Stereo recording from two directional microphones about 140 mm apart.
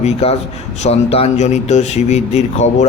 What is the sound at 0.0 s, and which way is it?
Speech, 45° left (ahead or behind).